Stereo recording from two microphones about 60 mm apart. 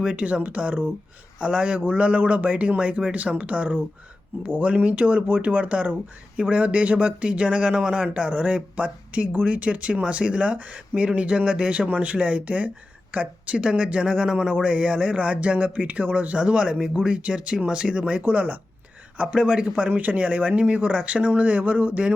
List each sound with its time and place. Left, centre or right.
0.0 s speech: centre
18.2 s speech: right
19.1 s speech: centre